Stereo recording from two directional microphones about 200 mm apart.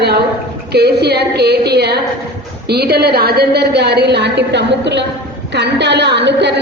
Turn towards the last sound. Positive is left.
turn(degrees=-60)  # may be behind; listen again after turning